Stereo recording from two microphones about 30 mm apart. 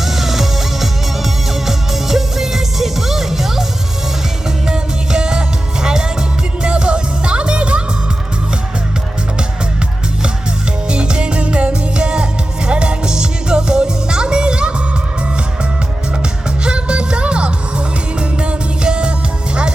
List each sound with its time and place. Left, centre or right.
0.0 s music: centre
4.7 s music: right
10.8 s music: right
16.6 s music: right